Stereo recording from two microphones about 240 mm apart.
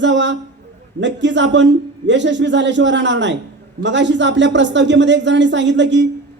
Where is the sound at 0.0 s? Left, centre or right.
Right.